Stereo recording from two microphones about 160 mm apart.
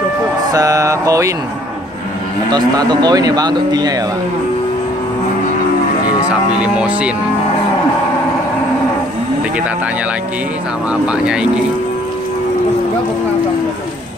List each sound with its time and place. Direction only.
0.5 s speech: 20° right (ahead or behind)
2.5 s speech: 25° right (ahead or behind)
6.2 s speech: 5° right (ahead or behind)